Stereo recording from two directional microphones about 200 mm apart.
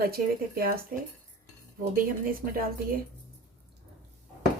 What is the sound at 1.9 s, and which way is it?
Speech, 45° right (ahead or behind).